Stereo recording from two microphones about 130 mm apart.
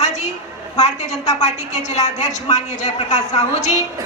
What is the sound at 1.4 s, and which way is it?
A woman's voice, 60° left (ahead or behind).